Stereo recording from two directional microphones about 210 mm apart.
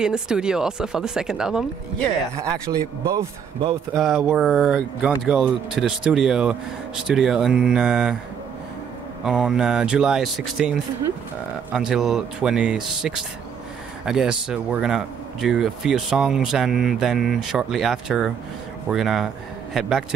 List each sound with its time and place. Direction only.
0.0 s speech: 5° right (ahead or behind)
2.7 s speech: 20° right (ahead or behind)
3.9 s speech: centre (ahead or behind)
9.2 s speech: 5° right (ahead or behind)